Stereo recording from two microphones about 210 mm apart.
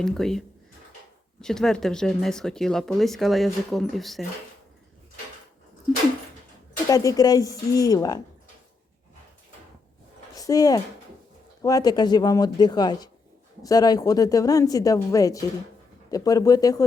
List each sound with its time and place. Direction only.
0.0 s speech: centre (ahead or behind)
6.8 s speech: 15° left (ahead or behind)
10.3 s a sound: 15° left (ahead or behind)
11.6 s speech: 15° left (ahead or behind)